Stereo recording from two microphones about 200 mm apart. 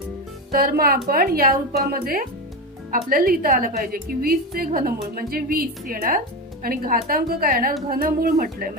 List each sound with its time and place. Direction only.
0.5 s a woman's voice: 50° right (ahead or behind)